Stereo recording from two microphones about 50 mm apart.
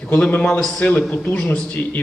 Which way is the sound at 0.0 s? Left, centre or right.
Left.